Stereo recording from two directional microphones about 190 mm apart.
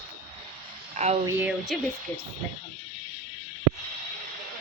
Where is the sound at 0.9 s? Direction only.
35° right (ahead or behind).